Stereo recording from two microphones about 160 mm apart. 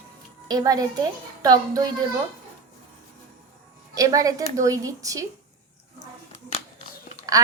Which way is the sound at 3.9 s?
20° right (ahead or behind).